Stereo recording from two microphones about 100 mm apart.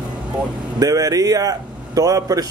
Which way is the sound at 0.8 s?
35° right (ahead or behind).